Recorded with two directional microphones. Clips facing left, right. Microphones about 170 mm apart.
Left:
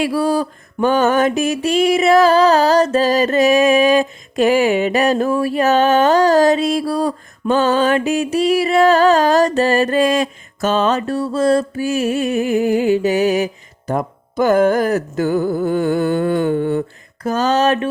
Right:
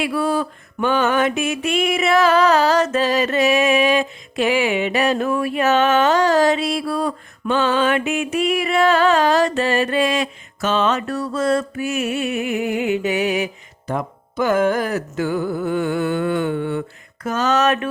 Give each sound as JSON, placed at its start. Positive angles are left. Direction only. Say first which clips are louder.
{"t": 0.0, "sound": "mantra", "louder": "left 3 dB", "side_deg": 35}